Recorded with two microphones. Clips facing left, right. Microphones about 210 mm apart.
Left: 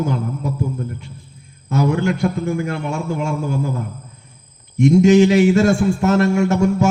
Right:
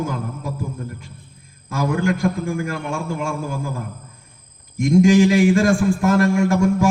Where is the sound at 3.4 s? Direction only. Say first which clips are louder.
Left 5 dB; 25° left (ahead or behind).